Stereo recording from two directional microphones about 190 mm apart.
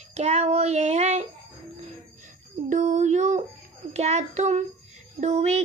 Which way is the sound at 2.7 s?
40° right (ahead or behind).